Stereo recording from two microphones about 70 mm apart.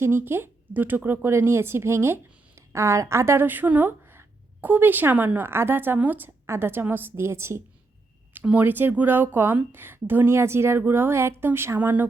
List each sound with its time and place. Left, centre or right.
0.0 s speech: right
3.4 s speech: right
8.4 s speech: right